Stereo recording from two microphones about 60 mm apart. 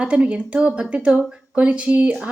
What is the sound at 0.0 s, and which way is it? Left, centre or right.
A woman's voice, centre.